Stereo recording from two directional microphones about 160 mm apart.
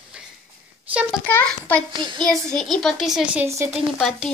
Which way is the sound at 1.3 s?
10° left (ahead or behind).